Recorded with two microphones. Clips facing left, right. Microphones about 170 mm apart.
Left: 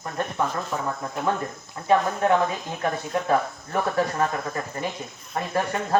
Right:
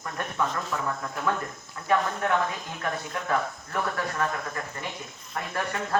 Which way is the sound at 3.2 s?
25° left (ahead or behind).